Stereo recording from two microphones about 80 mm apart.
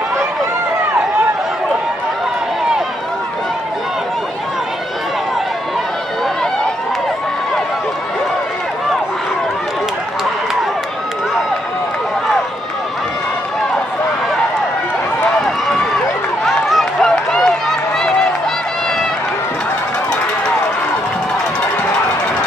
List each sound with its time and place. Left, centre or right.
16.4 s run: centre